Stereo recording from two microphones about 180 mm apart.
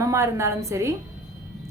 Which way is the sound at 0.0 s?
15° right (ahead or behind).